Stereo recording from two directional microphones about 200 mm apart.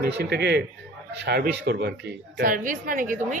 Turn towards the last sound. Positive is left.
turn(degrees=-40)  # may be behind; listen again after turning